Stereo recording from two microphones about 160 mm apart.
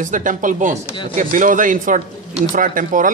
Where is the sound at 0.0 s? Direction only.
55° right (ahead or behind).